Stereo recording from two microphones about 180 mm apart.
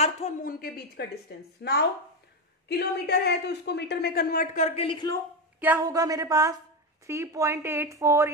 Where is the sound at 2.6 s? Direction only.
65° left (ahead or behind); by 5.2 s 25° left (ahead or behind).